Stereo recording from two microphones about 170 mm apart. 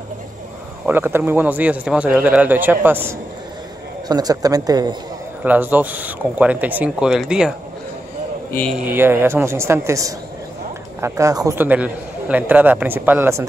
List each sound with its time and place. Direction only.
0.8 s a man's voice: 10° right (ahead or behind)
5.4 s a man's voice: 10° right (ahead or behind)
8.5 s a man's voice: 10° left (ahead or behind)
8.7 s a man's voice: 10° right (ahead or behind)